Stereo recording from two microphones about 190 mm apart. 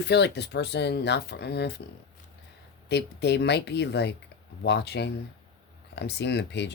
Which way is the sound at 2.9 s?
65° left (ahead or behind).